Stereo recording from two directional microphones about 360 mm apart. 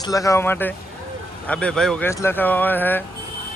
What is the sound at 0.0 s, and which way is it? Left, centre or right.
Speech, centre.